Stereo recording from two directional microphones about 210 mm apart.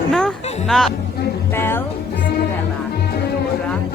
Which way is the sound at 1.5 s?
10° left (ahead or behind).